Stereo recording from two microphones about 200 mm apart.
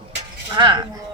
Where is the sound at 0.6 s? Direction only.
25° right (ahead or behind).